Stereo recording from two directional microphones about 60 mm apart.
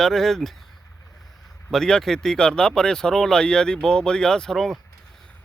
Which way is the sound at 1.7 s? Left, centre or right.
Centre.